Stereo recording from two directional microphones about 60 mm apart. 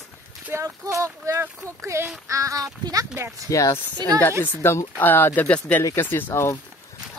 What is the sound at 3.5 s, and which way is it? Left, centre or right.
Speech, left.